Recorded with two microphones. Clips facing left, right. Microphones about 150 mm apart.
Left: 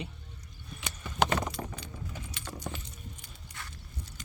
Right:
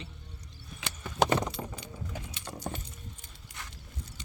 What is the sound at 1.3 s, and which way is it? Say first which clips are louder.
Keys jangling: right 2 dB; 20° right (ahead or behind).